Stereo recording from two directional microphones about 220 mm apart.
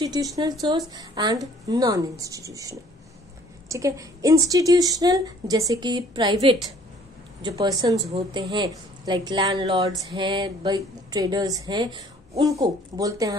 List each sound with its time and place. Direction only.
0.0 s a woman's voice: 15° right (ahead or behind)